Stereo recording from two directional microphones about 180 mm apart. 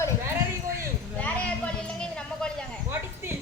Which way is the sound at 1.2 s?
5° left (ahead or behind).